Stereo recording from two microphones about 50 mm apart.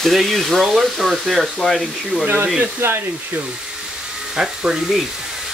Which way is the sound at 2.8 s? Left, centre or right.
Right.